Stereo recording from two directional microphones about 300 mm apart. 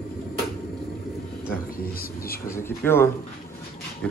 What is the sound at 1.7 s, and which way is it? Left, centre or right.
Speech, left.